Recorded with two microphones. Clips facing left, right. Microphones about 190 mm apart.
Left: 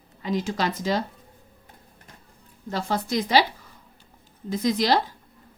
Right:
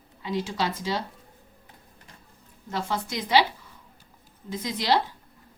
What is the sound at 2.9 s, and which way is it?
Speech, 35° left (ahead or behind).